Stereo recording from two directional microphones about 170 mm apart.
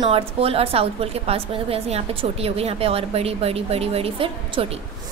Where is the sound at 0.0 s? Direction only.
35° right (ahead or behind).